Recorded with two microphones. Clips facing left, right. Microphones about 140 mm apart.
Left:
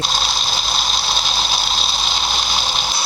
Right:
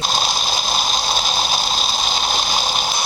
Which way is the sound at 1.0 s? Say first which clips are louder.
Right 2 dB; 45° right (ahead or behind).